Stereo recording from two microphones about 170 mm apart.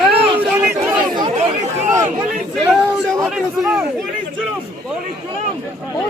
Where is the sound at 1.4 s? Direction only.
45° right (ahead or behind).